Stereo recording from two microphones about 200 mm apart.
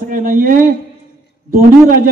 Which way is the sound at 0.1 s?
45° right (ahead or behind).